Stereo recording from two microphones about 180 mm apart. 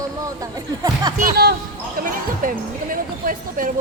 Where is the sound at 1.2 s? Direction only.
55° right (ahead or behind).